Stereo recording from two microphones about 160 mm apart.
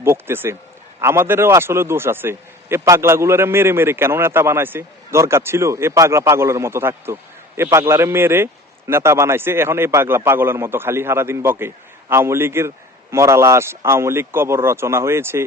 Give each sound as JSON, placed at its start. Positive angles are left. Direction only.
{"t": 0.0, "sound": "a man's voice", "side_deg": -15}